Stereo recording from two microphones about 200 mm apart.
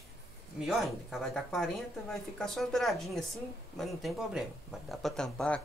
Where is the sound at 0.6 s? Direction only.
Centre (ahead or behind).